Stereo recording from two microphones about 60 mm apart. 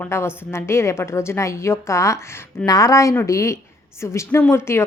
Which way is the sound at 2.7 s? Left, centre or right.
Left.